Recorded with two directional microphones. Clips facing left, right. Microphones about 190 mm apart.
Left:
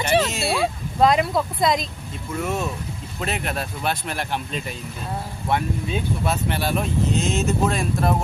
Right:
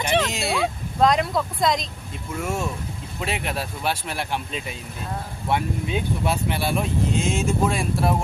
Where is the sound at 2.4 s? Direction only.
10° right (ahead or behind).